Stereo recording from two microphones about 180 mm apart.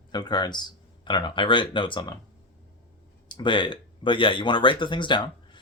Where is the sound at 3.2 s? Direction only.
25° left (ahead or behind).